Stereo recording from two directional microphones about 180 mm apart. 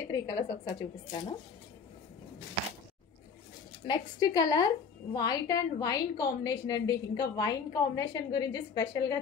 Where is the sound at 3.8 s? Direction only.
25° left (ahead or behind).